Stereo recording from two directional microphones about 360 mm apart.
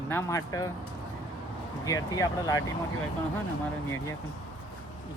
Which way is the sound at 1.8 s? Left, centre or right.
Centre.